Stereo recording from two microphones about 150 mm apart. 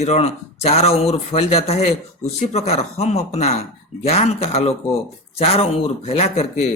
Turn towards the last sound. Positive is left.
turn(degrees=45)  # may be behind; listen again after turning